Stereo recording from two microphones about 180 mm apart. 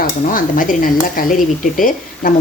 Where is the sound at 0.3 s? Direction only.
50° left (ahead or behind).